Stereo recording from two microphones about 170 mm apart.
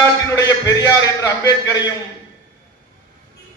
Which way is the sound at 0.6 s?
20° left (ahead or behind).